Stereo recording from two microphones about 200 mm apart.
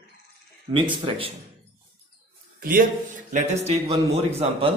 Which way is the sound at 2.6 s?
45° right (ahead or behind).